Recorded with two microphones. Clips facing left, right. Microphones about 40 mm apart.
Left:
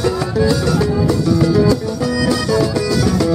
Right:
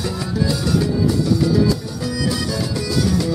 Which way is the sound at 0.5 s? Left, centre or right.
Left.